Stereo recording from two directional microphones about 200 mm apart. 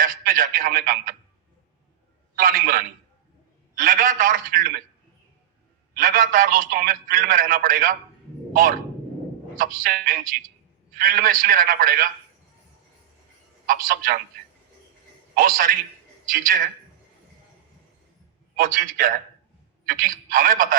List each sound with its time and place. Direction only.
0.0 s a man's voice: 45° right (ahead or behind)
2.3 s a man's voice: 45° right (ahead or behind)
5.9 s a man's voice: 45° right (ahead or behind)
9.6 s a man's voice: 45° right (ahead or behind)
13.7 s a man's voice: 45° right (ahead or behind)
15.4 s a man's voice: 45° right (ahead or behind)
18.5 s a man's voice: 45° right (ahead or behind)